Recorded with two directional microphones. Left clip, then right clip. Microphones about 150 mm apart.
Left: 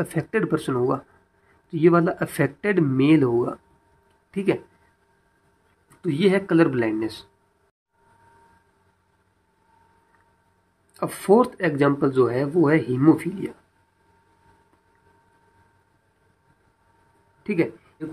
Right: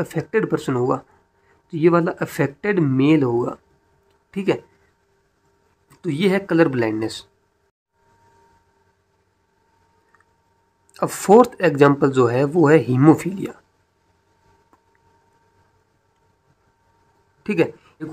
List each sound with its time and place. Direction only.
0.0 s speech: 10° right (ahead or behind)
5.9 s speech: 15° right (ahead or behind)
10.9 s speech: 35° right (ahead or behind)
17.4 s a sound: 30° right (ahead or behind)